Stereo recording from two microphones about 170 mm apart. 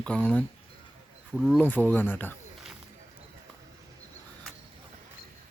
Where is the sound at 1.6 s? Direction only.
10° left (ahead or behind).